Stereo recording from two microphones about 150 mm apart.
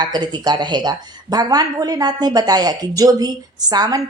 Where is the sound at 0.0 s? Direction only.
30° right (ahead or behind).